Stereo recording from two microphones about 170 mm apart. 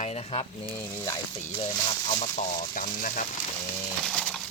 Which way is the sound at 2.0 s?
45° left (ahead or behind).